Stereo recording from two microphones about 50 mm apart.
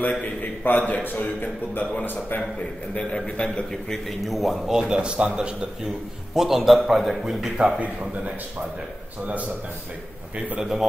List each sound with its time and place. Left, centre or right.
0.1 s a man's voice: left
2.9 s a man's voice: left
3.9 s speech: centre
4.7 s speech: centre
6.3 s a man's voice: centre
10.6 s a man's voice: centre